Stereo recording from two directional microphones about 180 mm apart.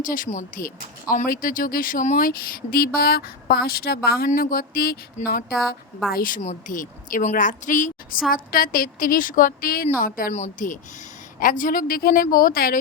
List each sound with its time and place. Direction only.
0.0 s a woman's voice: 50° left (ahead or behind)
10.3 s a woman's voice: 45° left (ahead or behind)